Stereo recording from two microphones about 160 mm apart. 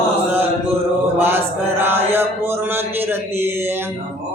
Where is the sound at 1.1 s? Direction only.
15° right (ahead or behind).